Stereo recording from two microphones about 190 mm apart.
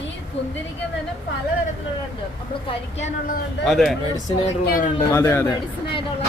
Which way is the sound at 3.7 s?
Centre (ahead or behind).